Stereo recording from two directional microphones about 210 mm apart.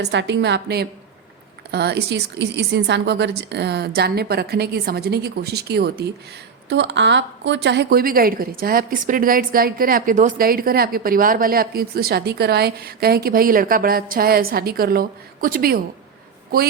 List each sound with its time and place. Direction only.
0.0 s a woman's voice: 55° right (ahead or behind)